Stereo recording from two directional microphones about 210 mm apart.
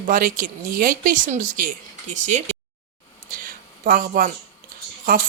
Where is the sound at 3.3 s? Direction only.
40° right (ahead or behind).